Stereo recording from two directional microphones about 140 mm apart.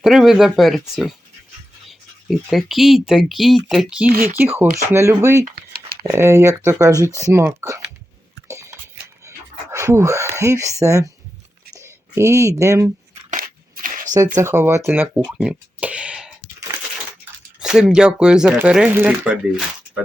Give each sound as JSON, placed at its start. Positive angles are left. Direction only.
{"t": 0.0, "sound": "speech", "side_deg": 0}
{"t": 4.1, "sound": "speech", "side_deg": -90}
{"t": 4.4, "sound": "speech", "side_deg": -15}
{"t": 8.4, "sound": "chewing", "side_deg": -20}
{"t": 9.7, "sound": "speech", "side_deg": -20}
{"t": 13.3, "sound": "a sound", "side_deg": -75}
{"t": 14.4, "sound": "speech", "side_deg": -20}
{"t": 17.6, "sound": "speech", "side_deg": -5}